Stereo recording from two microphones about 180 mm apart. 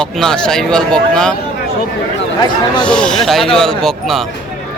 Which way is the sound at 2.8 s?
5° left (ahead or behind).